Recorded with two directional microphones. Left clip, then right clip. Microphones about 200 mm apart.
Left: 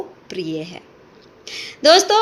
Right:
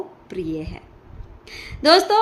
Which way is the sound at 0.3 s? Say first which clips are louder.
Left 2 dB; 15° right (ahead or behind).